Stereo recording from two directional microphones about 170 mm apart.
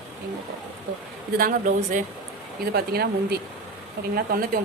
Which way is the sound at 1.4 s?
55° right (ahead or behind).